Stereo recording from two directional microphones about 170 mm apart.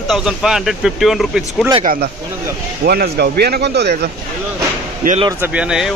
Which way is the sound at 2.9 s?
65° right (ahead or behind).